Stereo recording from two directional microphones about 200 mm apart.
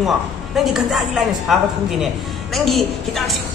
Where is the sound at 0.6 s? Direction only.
Centre (ahead or behind).